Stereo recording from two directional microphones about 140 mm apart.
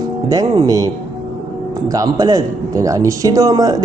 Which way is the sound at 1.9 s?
25° right (ahead or behind).